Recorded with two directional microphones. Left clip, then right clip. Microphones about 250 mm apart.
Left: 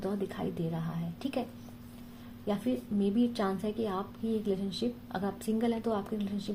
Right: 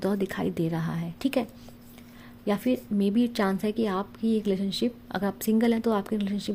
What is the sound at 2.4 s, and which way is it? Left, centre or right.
A woman's voice, right.